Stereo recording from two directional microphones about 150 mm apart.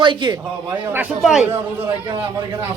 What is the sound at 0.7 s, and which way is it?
Speech, 10° right (ahead or behind).